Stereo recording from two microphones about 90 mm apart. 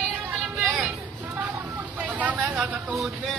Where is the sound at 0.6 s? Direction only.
5° right (ahead or behind).